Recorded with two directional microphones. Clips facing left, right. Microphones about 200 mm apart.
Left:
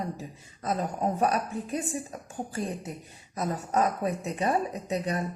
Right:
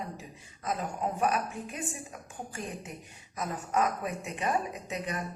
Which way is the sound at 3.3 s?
35° left (ahead or behind).